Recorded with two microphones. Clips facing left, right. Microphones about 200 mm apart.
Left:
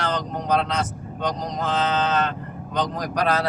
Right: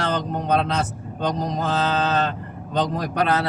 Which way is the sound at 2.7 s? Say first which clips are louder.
Right 2 dB; 25° right (ahead or behind).